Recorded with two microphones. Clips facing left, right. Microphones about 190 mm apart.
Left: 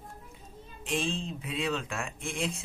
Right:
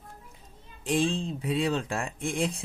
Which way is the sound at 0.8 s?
35° right (ahead or behind).